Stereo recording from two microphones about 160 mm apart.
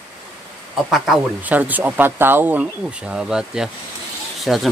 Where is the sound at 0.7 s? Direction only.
Centre (ahead or behind).